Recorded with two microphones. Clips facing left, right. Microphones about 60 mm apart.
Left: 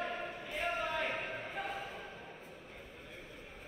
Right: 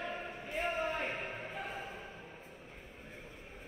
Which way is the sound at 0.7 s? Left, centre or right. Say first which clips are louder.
Even; right.